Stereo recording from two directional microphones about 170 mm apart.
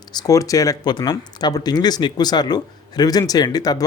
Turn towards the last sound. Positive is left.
turn(degrees=20)  # may be behind; listen again after turning